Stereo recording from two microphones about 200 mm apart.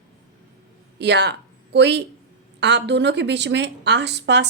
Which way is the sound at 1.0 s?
55° right (ahead or behind).